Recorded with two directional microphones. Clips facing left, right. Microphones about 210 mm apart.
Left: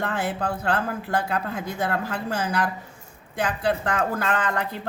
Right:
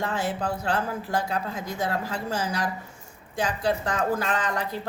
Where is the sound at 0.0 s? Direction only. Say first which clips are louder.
Left 1 dB; 60° left (ahead or behind).